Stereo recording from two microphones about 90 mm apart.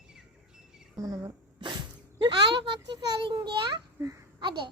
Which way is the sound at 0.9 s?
40° right (ahead or behind).